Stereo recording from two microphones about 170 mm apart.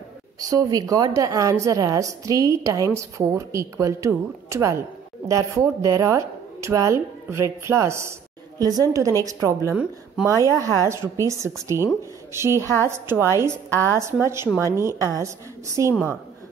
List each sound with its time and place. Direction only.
0.4 s a woman's voice: 20° right (ahead or behind)